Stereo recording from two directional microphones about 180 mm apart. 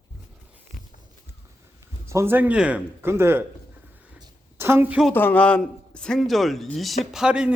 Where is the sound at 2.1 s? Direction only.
15° right (ahead or behind).